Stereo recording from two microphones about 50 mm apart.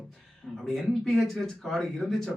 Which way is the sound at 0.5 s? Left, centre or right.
Centre.